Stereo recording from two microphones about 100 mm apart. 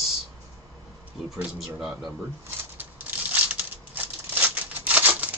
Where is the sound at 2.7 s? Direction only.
15° right (ahead or behind).